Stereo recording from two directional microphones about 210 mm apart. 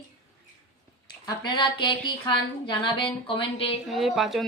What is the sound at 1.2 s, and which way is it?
A woman's voice, 20° left (ahead or behind).